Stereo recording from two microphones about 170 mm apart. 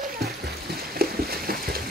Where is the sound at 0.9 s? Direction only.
60° right (ahead or behind).